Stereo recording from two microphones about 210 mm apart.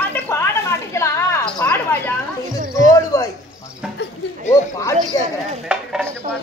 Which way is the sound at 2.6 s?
40° right (ahead or behind).